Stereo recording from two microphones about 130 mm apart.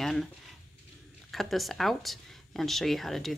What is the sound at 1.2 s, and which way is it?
A woman's voice, centre (ahead or behind).